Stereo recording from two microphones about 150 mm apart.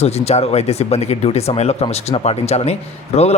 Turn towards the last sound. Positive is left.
turn(degrees=45)  # may be behind; listen again after turning